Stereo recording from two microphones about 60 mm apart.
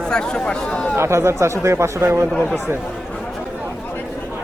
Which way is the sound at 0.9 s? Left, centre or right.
Right.